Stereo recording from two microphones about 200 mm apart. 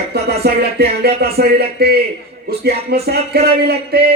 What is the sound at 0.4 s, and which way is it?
Speech, 50° right (ahead or behind).